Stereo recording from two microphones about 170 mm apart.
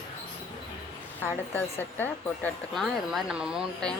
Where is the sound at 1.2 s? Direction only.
10° left (ahead or behind).